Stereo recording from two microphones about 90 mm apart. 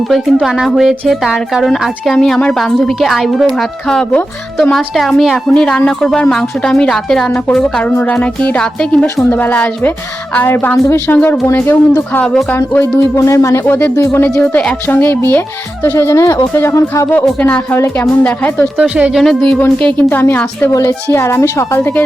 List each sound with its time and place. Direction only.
0.1 s a woman's voice: centre (ahead or behind); by 11.3 s 20° left (ahead or behind)
11.4 s speech: 35° left (ahead or behind)
12.1 s a woman's voice: 10° left (ahead or behind)
12.5 s speech: 30° left (ahead or behind)
18.2 s a woman's voice: 15° left (ahead or behind)
18.8 s speech: 10° right (ahead or behind)
19.2 s a woman's voice: 5° left (ahead or behind)
19.8 s speech: 20° left (ahead or behind)